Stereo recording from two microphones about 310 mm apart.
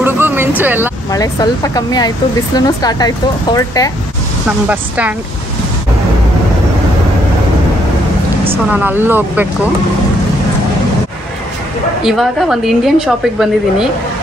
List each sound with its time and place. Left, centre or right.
0.0 s vehicle: centre
1.1 s speech: centre
4.6 s a woman's voice: centre
8.7 s speech: centre
12.0 s a woman's voice: centre